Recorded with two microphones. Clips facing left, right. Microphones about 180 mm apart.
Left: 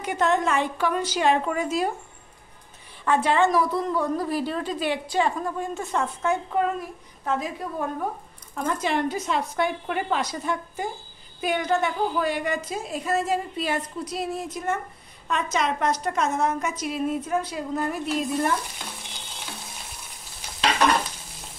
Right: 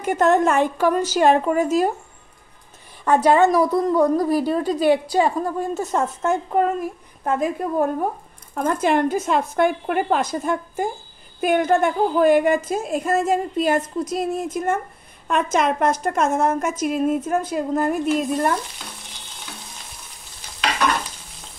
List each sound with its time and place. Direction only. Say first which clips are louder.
0.0 s a woman's voice: right 6 dB; 45° right (ahead or behind)
3.1 s a woman's voice: right 5 dB; 40° right (ahead or behind)